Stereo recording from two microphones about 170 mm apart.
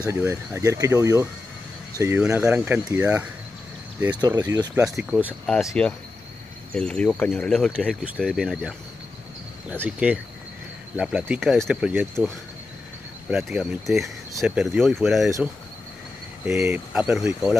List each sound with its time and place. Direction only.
0.1 s speech: 15° right (ahead or behind)
4.2 s speech: 20° right (ahead or behind)
4.9 s speech: centre (ahead or behind)
9.8 s speech: 5° right (ahead or behind)
11.4 s speech: centre (ahead or behind)
13.3 s speech: centre (ahead or behind)
16.4 s speech: 10° right (ahead or behind)